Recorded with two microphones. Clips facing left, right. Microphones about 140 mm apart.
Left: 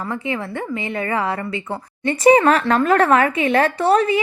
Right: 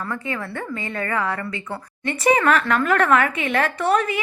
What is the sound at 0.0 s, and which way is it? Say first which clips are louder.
Speech: left 3 dB; 20° left (ahead or behind).